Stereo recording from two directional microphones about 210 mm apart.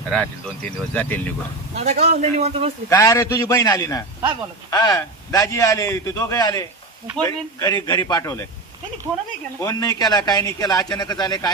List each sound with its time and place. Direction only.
0.1 s a man's voice: 5° left (ahead or behind)
1.7 s a man's voice: 30° right (ahead or behind)
2.9 s a man's voice: 15° left (ahead or behind)
9.6 s a man's voice: 15° left (ahead or behind)